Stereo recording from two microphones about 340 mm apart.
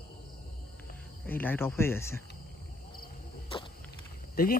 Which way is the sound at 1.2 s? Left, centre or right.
Centre.